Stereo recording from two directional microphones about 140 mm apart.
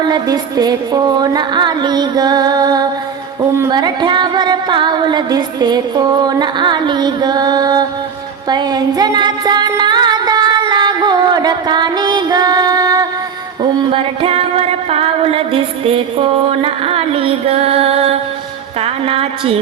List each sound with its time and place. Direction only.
0.0 s a sound: 30° right (ahead or behind)
3.7 s singing: 30° right (ahead or behind)
8.4 s music: 30° right (ahead or behind)
13.6 s music: 40° right (ahead or behind)
18.8 s speech: 45° right (ahead or behind)